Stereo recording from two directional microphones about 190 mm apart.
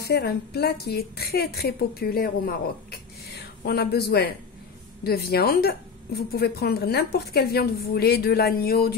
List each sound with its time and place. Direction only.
0.0 s a woman's voice: 55° left (ahead or behind)